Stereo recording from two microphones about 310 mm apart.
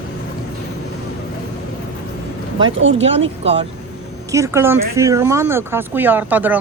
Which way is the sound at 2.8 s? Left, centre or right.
Right.